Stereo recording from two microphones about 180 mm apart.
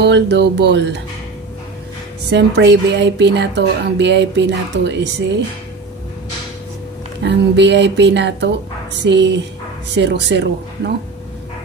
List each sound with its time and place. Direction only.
0.0 s speech: 75° right (ahead or behind)
2.3 s speech: 70° right (ahead or behind)
7.2 s speech: 75° right (ahead or behind)